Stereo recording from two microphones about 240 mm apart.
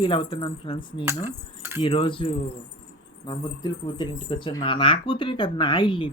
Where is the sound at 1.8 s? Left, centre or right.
Left.